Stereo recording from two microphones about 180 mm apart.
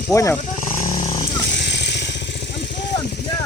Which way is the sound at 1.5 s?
70° left (ahead or behind).